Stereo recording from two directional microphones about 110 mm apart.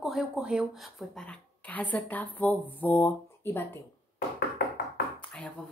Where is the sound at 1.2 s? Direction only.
10° left (ahead or behind).